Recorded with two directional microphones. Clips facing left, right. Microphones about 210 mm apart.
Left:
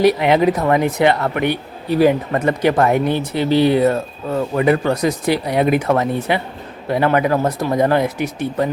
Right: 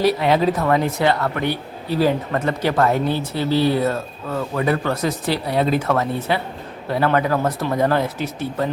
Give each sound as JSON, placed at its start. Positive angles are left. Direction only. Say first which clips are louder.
{"t": 0.0, "sound": "speech", "louder": "left 4 dB", "side_deg": 15}